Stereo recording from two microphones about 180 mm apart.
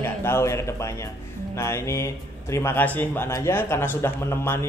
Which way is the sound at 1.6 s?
15° left (ahead or behind).